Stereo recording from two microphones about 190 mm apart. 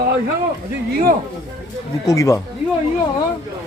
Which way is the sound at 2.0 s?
15° left (ahead or behind).